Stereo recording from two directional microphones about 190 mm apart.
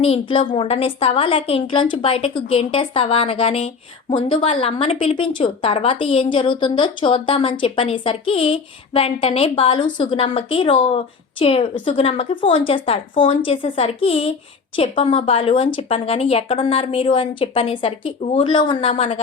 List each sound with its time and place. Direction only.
0.0 s a woman's voice: 30° left (ahead or behind)